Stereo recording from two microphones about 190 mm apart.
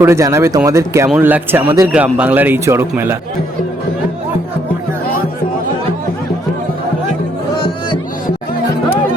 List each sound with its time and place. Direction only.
0.0 s a man's voice: 15° right (ahead or behind)
1.9 s a man's voice: 5° right (ahead or behind)